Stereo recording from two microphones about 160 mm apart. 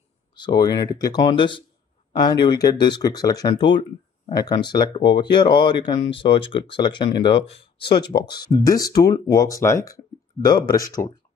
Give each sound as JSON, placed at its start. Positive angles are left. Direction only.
{"t": 0.4, "sound": "speech", "side_deg": 25}